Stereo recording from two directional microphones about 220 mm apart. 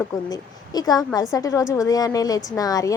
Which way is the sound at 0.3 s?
15° left (ahead or behind).